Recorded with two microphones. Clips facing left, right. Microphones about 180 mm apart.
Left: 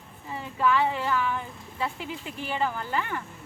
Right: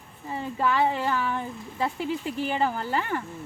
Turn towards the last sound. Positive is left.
turn(degrees=-40)  # may be behind; listen again after turning